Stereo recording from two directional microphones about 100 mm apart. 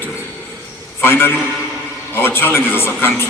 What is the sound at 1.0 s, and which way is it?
A man's voice, 25° left (ahead or behind).